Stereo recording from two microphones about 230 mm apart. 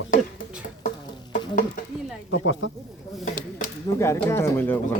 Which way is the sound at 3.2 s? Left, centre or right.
Left.